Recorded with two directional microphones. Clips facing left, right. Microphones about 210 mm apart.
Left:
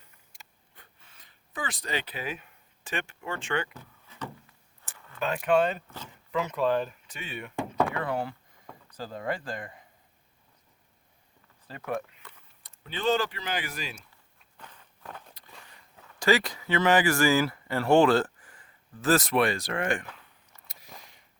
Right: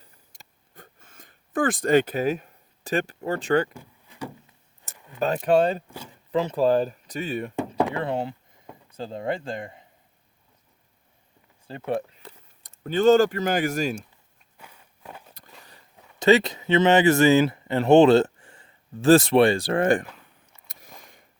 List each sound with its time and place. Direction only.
0.0 s a sound: 40° right (ahead or behind)
3.8 s a sound: 10° right (ahead or behind)
4.9 s keys jangling: 20° right (ahead or behind)
5.2 s speech: 35° right (ahead or behind)
7.9 s speech: 25° right (ahead or behind)
11.7 s speech: 30° right (ahead or behind)
12.6 s speech: 45° right (ahead or behind)
14.6 s walk: 10° right (ahead or behind)
16.0 s speech: 20° right (ahead or behind); by 20.1 s 35° right (ahead or behind)